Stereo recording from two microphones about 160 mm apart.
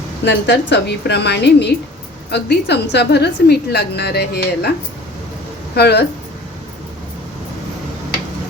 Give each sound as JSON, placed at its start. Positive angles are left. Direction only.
{"t": 0.3, "sound": "a woman's voice", "side_deg": 90}
{"t": 5.7, "sound": "a woman's voice", "side_deg": 90}